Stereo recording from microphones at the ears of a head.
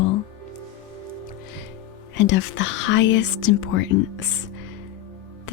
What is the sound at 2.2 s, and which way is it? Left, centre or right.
Speech, left.